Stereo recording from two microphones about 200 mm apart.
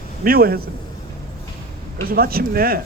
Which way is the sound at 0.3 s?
50° right (ahead or behind).